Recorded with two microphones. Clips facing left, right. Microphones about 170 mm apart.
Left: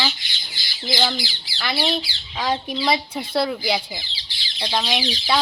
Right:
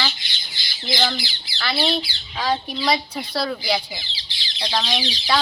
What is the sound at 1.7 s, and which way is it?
Speech, 5° left (ahead or behind).